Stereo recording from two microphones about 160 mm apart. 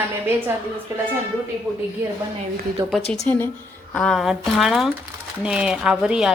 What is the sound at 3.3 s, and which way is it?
A woman's voice, 10° left (ahead or behind).